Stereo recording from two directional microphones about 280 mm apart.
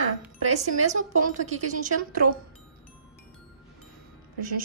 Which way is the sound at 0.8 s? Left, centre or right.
Right.